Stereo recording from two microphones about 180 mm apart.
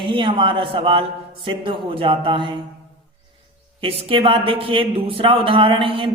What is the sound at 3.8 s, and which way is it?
Speech, 30° right (ahead or behind).